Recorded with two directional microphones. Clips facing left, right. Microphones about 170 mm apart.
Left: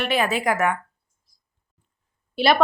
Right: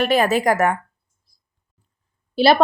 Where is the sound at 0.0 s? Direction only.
40° right (ahead or behind).